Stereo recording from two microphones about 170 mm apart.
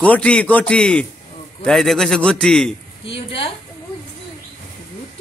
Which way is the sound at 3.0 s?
35° left (ahead or behind).